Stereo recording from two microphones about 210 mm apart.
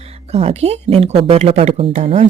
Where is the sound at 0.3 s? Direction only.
30° right (ahead or behind).